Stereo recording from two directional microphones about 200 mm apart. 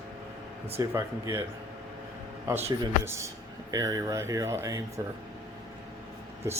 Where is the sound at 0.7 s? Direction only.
10° right (ahead or behind).